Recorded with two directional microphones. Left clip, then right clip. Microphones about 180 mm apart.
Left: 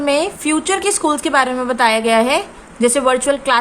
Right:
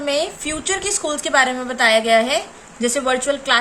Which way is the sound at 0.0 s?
25° left (ahead or behind).